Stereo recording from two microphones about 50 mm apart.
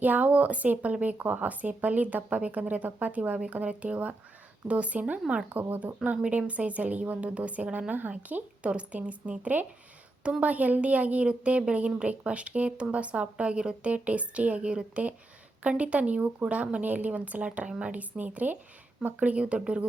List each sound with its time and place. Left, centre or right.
0.0 s a woman's voice: right
17.7 s a woman's voice: right
17.9 s a woman's voice: right